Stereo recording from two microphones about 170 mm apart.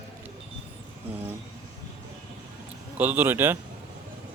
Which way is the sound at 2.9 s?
10° right (ahead or behind).